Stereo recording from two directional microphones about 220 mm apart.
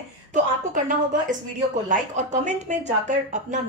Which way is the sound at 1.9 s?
35° right (ahead or behind).